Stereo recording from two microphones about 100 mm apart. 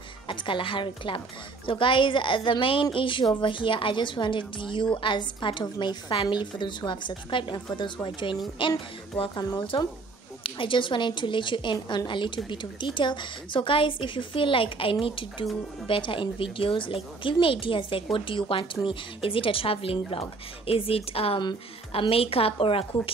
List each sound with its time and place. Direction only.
0.3 s a woman's voice: 55° left (ahead or behind)
9.2 s a woman's voice: 45° left (ahead or behind)
10.4 s a woman's voice: 60° left (ahead or behind)